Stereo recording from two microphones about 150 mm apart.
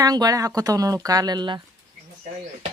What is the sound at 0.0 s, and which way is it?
Speech, 25° right (ahead or behind).